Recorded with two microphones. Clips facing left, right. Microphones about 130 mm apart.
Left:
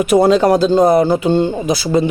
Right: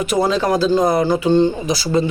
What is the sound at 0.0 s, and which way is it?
Speech, 55° left (ahead or behind).